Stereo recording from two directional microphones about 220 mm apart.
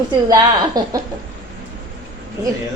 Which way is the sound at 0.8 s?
15° right (ahead or behind).